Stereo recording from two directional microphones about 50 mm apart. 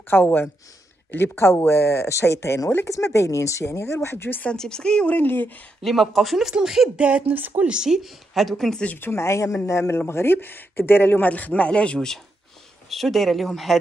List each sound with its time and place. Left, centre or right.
0.1 s speech: left
4.6 s speech: centre
5.0 s speech: left
5.8 s speech: centre
7.0 s speech: right
7.3 s speech: right
7.6 s speech: centre
8.9 s speech: left
9.2 s speech: left
9.9 s speech: left
12.9 s speech: centre